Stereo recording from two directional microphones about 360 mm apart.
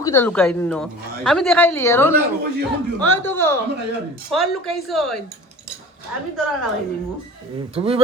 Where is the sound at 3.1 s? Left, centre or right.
Centre.